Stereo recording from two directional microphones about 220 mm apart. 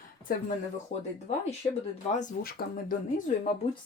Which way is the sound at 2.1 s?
40° left (ahead or behind).